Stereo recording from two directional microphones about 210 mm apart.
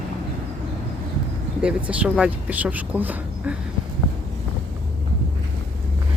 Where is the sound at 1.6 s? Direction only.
5° right (ahead or behind).